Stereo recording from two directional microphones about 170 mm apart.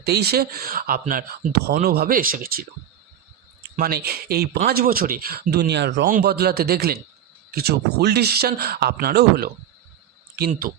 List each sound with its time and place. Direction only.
0.0 s speech: 70° right (ahead or behind); by 6.1 s 85° right
6.1 s speech: 65° right (ahead or behind)